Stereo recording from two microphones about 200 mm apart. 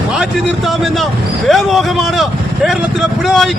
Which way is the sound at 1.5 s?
Centre (ahead or behind).